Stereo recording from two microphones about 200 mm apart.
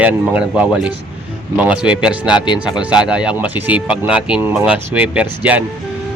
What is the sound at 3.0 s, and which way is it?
Speech, 5° right (ahead or behind).